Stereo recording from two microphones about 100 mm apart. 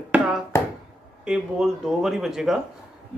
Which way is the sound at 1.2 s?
5° right (ahead or behind).